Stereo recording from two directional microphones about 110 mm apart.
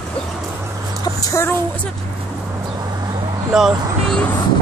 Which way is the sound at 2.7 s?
35° right (ahead or behind).